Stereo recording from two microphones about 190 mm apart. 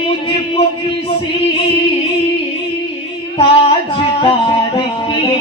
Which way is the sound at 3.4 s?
30° left (ahead or behind).